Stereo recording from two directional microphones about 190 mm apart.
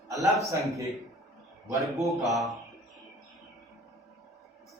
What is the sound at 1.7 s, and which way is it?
Speech, 15° right (ahead or behind).